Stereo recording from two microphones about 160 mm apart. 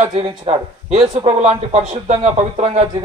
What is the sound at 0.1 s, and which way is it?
A man's voice, 40° right (ahead or behind).